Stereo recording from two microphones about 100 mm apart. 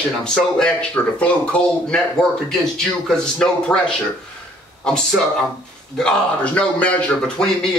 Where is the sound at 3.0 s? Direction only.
5° left (ahead or behind).